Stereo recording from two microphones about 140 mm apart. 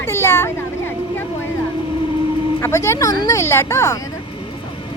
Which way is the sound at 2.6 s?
20° left (ahead or behind).